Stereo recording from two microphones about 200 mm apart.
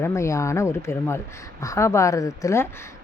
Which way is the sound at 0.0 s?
15° left (ahead or behind).